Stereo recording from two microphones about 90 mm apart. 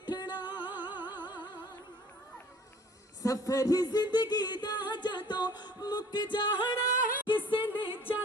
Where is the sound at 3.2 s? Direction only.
35° left (ahead or behind); by 6.7 s 60° left (ahead or behind).